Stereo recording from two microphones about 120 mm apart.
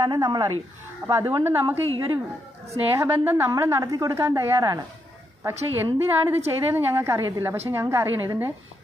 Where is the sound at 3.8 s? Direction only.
30° right (ahead or behind).